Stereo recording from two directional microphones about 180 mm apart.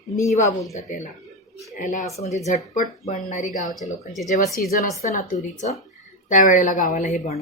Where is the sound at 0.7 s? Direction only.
40° left (ahead or behind); by 4.8 s 55° left (ahead or behind).